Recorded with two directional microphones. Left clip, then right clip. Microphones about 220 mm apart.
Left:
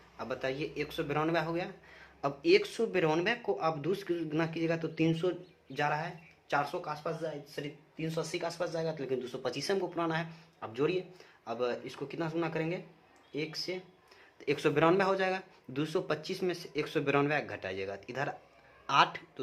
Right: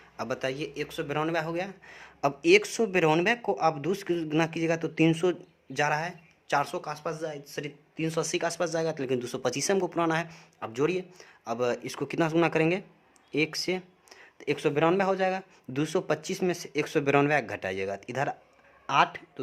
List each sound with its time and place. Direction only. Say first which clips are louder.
0.2 s speech: right 4 dB; 35° right (ahead or behind)
14.3 s speech: right 2 dB; 20° right (ahead or behind)